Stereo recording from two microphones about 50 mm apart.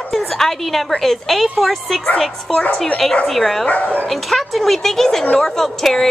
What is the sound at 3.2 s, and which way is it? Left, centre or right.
A woman's voice, centre.